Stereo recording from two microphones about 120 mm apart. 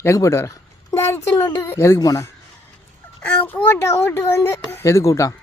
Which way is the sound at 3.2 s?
15° left (ahead or behind).